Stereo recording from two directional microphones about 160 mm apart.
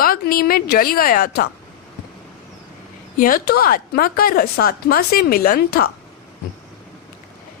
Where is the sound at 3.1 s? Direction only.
60° left (ahead or behind).